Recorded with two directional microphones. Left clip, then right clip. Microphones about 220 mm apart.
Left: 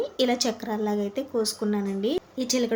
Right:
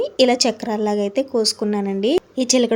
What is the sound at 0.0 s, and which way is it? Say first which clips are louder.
A woman's voice: right 9 dB; 35° right (ahead or behind).